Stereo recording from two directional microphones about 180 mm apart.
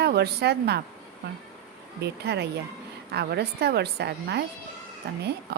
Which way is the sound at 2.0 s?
65° right (ahead or behind).